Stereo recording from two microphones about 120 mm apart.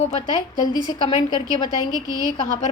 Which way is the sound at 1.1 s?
35° left (ahead or behind).